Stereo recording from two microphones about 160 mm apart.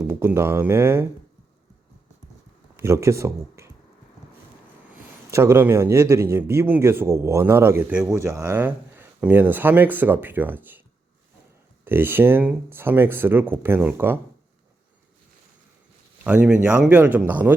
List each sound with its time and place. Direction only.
0.0 s speech: 10° right (ahead or behind)
2.7 s speech: 15° right (ahead or behind)
5.3 s speech: 15° right (ahead or behind)
8.1 s speech: 20° right (ahead or behind)
11.9 s speech: 15° right (ahead or behind)
16.2 s speech: 10° right (ahead or behind)